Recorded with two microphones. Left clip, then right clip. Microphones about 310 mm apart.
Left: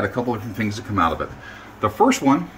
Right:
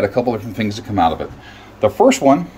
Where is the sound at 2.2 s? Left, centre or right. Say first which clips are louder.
Right 6 dB; right.